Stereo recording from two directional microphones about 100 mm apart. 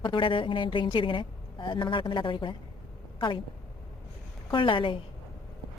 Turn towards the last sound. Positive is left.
turn(degrees=55)  # may be behind; listen again after turning